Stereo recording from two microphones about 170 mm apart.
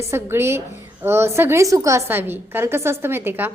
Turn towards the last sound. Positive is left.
turn(degrees=-10)  # may be behind; listen again after turning